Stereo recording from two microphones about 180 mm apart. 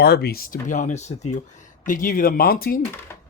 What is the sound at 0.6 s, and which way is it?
Speech, 45° left (ahead or behind).